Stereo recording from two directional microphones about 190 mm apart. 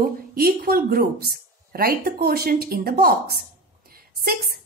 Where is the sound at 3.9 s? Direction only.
50° right (ahead or behind).